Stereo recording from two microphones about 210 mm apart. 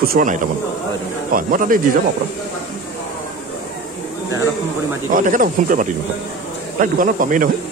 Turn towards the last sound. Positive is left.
turn(degrees=-40)  # may be behind; listen again after turning